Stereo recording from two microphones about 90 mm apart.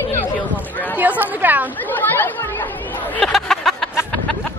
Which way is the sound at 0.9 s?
20° right (ahead or behind).